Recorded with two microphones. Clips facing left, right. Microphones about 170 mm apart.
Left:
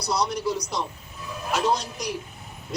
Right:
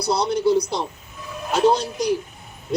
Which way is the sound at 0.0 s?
30° right (ahead or behind).